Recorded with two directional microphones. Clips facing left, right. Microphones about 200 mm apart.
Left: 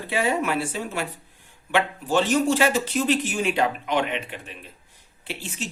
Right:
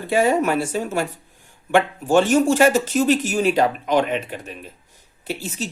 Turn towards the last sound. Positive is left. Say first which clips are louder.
# right 5 dB
turn(degrees=-40)  # may be behind; listen again after turning